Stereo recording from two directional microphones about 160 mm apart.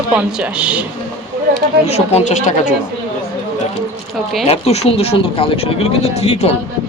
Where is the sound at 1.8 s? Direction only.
40° left (ahead or behind).